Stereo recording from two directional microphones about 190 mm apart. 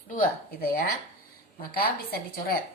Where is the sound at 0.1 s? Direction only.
50° left (ahead or behind).